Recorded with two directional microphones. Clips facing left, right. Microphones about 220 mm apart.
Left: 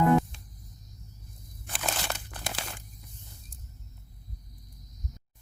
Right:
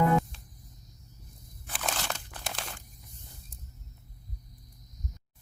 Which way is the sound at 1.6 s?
Centre (ahead or behind).